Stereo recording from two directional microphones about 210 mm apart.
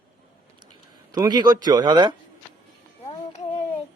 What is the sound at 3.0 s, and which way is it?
Child singing, 30° left (ahead or behind).